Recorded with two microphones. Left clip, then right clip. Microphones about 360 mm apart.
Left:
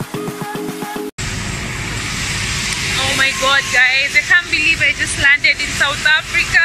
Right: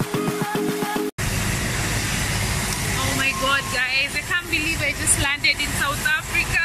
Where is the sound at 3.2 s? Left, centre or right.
Centre.